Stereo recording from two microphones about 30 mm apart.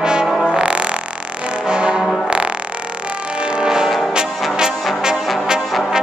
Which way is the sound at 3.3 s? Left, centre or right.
Right.